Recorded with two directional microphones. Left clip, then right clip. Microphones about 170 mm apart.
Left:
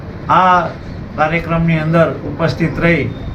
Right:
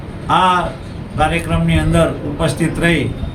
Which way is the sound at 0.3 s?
15° right (ahead or behind).